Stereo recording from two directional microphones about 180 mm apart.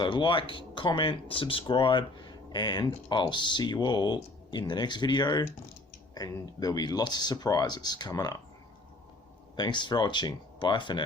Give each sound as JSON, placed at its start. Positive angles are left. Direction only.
{"t": 0.0, "sound": "speech", "side_deg": 25}
{"t": 9.6, "sound": "speech", "side_deg": 25}